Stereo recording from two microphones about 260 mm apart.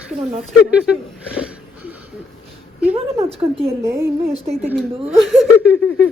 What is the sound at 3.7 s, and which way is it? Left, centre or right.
A woman's voice, centre.